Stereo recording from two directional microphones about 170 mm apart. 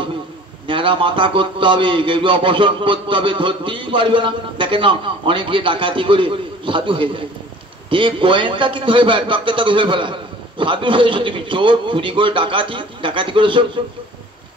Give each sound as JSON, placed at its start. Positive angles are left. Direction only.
{"t": 0.7, "sound": "a man's voice", "side_deg": -30}